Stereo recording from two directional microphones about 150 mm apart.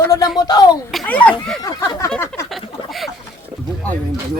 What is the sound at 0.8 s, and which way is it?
Speech, 5° left (ahead or behind).